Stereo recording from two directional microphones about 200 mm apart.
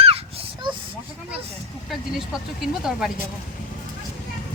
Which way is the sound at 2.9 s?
5° right (ahead or behind).